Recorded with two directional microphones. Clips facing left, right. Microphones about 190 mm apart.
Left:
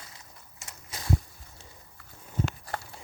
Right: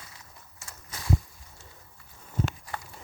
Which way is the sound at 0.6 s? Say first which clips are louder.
Even; 20° left (ahead or behind).